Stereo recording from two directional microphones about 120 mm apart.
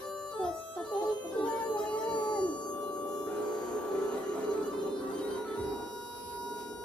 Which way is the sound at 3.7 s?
10° left (ahead or behind).